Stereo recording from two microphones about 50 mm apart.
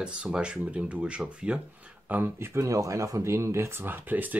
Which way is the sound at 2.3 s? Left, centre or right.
Right.